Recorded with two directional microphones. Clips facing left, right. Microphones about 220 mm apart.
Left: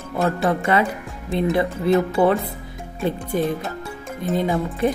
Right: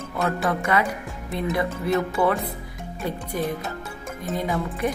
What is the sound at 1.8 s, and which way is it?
Speech, 30° left (ahead or behind).